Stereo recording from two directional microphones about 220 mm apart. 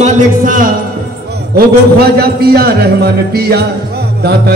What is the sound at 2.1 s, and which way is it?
A man's voice, 45° right (ahead or behind).